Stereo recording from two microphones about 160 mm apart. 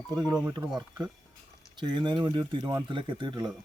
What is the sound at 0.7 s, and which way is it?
Speech, 25° right (ahead or behind).